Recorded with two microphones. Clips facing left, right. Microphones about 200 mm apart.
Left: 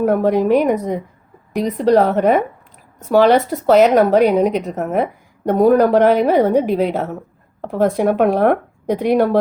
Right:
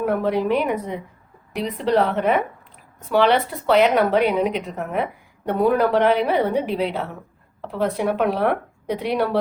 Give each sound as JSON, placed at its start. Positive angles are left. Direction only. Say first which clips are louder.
{"t": 0.0, "sound": "a woman's voice", "louder": "left 6 dB", "side_deg": 45}